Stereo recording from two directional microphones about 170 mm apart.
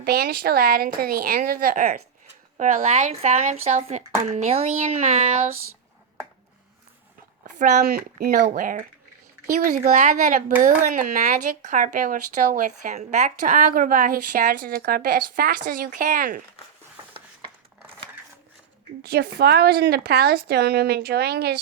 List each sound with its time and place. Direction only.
0.0 s a woman's voice: 65° right (ahead or behind)
2.6 s speech: 40° right (ahead or behind)
7.4 s a sound: 45° right (ahead or behind)
7.9 s a woman's voice: 65° right (ahead or behind)
19.0 s a woman's voice: 70° right (ahead or behind)